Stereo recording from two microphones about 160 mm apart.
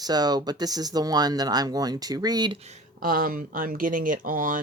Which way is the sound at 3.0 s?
60° right (ahead or behind).